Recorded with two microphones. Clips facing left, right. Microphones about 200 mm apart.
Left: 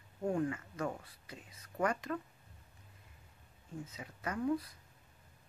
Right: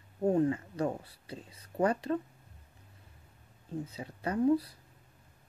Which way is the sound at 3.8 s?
30° right (ahead or behind).